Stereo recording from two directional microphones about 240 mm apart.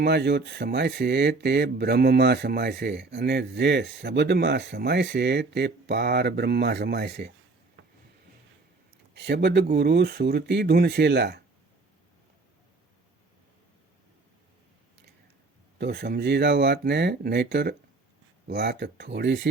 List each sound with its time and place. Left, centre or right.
0.0 s speech: right
7.8 s a sound: right
9.1 s speech: right
15.8 s speech: right